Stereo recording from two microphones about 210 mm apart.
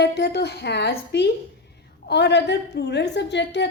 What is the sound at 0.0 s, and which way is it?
A woman's voice, 55° left (ahead or behind).